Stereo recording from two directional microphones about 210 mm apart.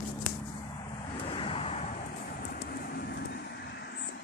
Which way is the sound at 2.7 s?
50° left (ahead or behind).